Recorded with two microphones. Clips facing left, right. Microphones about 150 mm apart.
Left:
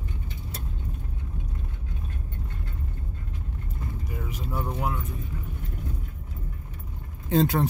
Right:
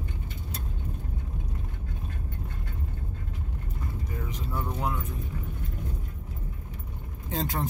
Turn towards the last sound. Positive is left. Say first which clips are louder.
# left 9 dB
turn(degrees=70)  # may be behind; listen again after turning